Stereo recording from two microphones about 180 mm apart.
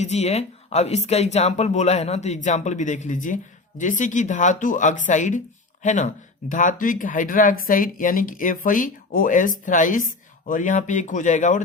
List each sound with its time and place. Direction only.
0.0 s speech: 40° left (ahead or behind)